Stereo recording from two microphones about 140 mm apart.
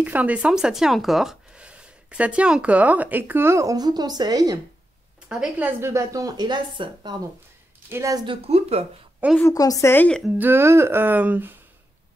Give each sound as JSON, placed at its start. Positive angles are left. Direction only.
{"t": 0.0, "sound": "speech", "side_deg": -10}
{"t": 5.3, "sound": "a woman's voice", "side_deg": -5}
{"t": 5.8, "sound": "speech", "side_deg": -20}
{"t": 7.9, "sound": "speech", "side_deg": -25}
{"t": 8.3, "sound": "speech", "side_deg": -45}
{"t": 9.4, "sound": "a woman's voice", "side_deg": 25}
{"t": 10.3, "sound": "speech", "side_deg": -15}